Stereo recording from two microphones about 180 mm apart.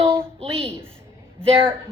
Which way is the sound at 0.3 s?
35° right (ahead or behind).